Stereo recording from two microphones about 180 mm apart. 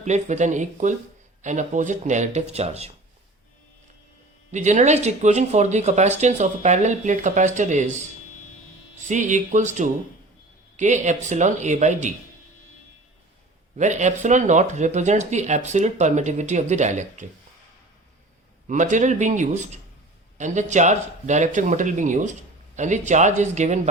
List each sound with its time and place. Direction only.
0.0 s speech: 40° right (ahead or behind)
4.5 s speech: 40° right (ahead or behind)
9.0 s speech: 45° right (ahead or behind)
13.7 s speech: 40° right (ahead or behind)
18.7 s speech: 45° right (ahead or behind)